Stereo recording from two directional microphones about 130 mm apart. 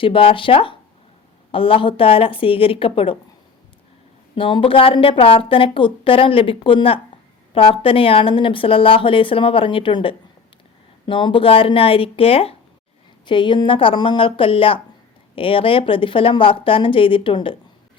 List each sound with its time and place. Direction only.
0.0 s speech: 45° left (ahead or behind)
4.4 s speech: 40° left (ahead or behind)
13.2 s speech: 35° left (ahead or behind)